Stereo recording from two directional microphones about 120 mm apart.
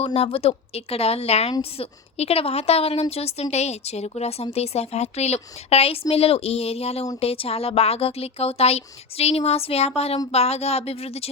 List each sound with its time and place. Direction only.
0.0 s speech: 60° left (ahead or behind)